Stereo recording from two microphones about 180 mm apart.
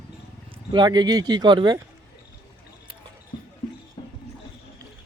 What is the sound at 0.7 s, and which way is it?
Speech, 25° right (ahead or behind).